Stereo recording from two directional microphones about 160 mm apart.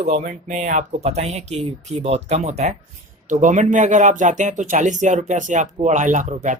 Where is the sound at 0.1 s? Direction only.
55° right (ahead or behind).